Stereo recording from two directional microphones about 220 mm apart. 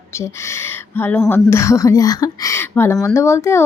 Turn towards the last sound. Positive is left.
turn(degrees=10)  # may be behind; listen again after turning